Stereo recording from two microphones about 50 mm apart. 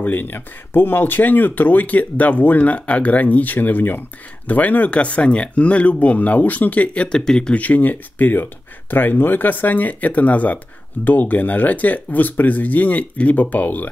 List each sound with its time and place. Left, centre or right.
0.0 s speech: left; by 7.5 s centre
7.5 s speech: left